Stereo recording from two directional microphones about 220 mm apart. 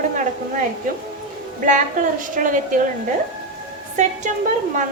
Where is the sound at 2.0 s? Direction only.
35° right (ahead or behind).